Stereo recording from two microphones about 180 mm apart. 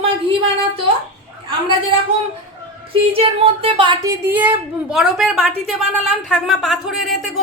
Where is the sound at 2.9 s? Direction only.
30° right (ahead or behind).